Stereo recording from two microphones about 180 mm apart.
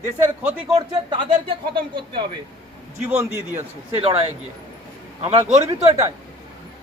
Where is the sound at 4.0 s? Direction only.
30° right (ahead or behind).